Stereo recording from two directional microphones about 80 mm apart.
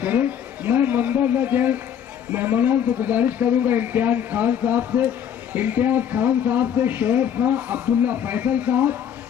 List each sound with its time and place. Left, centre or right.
0.0 s a man's voice: right